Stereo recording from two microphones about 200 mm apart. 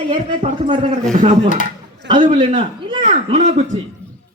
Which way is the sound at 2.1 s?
25° right (ahead or behind).